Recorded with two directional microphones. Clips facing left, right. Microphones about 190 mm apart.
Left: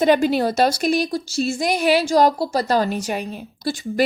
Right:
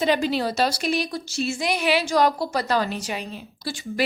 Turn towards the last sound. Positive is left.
turn(degrees=45)  # may be behind; listen again after turning